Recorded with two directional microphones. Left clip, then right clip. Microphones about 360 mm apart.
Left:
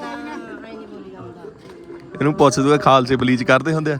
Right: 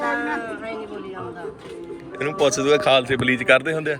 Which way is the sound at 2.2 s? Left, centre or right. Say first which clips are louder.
Left 5 dB; centre.